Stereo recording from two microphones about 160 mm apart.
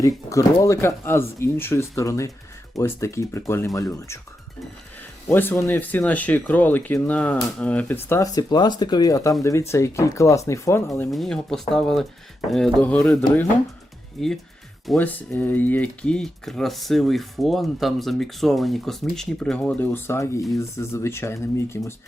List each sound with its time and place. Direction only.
0.0 s speech: 20° left (ahead or behind)
5.3 s speech: 15° left (ahead or behind)
8.1 s speech: 25° left (ahead or behind)
11.1 s speech: centre (ahead or behind)
14.2 s speech: centre (ahead or behind)